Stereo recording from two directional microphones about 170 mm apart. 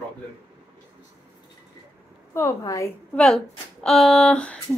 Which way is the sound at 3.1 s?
5° left (ahead or behind).